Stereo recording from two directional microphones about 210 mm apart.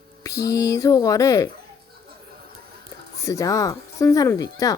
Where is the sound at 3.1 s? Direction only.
15° left (ahead or behind).